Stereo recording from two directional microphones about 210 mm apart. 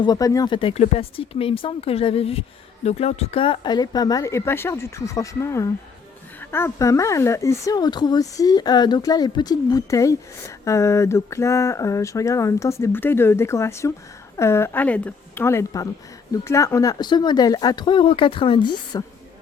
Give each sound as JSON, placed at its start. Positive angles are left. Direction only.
{"t": 0.0, "sound": "speech", "side_deg": 15}